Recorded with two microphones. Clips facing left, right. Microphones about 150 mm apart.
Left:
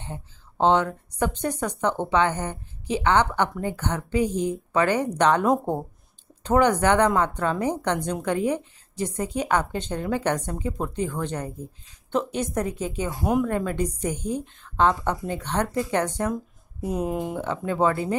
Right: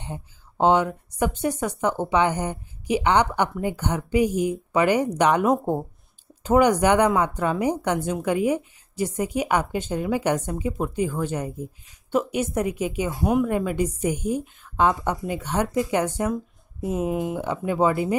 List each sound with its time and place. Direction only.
0.0 s speech: 10° right (ahead or behind)
13.1 s speech: centre (ahead or behind)